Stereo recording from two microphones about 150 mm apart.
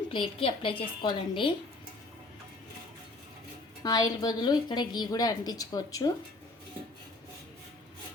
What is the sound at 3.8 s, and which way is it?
A woman's voice, 25° left (ahead or behind).